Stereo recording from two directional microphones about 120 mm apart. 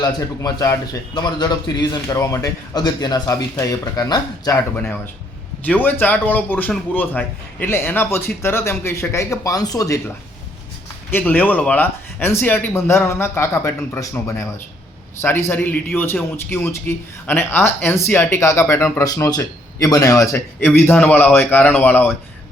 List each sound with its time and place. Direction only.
0.0 s a man's voice: 30° left (ahead or behind)
5.6 s a man's voice: 15° left (ahead or behind); by 10.0 s 30° left (ahead or behind)
11.1 s speech: 15° left (ahead or behind)